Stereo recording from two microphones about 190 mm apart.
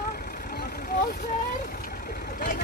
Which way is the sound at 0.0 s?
50° left (ahead or behind).